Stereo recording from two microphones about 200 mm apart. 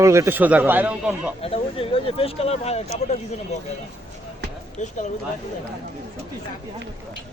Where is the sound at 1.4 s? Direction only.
30° left (ahead or behind).